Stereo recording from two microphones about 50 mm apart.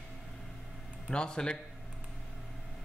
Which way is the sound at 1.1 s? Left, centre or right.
Centre.